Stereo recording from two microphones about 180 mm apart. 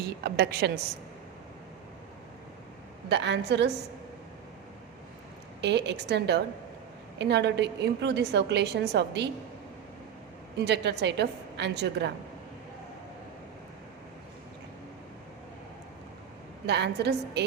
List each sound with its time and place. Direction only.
0.2 s a woman's voice: 65° right (ahead or behind)
3.1 s a woman's voice: 75° right (ahead or behind)
5.6 s a woman's voice: 70° right (ahead or behind)
10.6 s a woman's voice: 70° right (ahead or behind)
16.6 s a woman's voice: 70° right (ahead or behind)